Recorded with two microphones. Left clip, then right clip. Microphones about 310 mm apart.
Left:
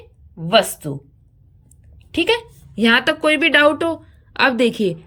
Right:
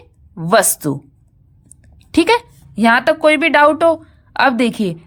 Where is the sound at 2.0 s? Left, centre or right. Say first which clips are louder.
Right 5 dB; centre.